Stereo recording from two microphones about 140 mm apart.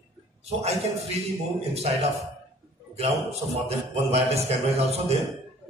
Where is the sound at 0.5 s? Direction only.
50° right (ahead or behind).